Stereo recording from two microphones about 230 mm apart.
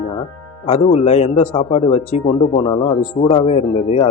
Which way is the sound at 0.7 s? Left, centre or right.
Left.